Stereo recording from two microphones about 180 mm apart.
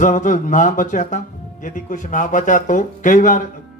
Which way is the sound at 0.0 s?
45° left (ahead or behind).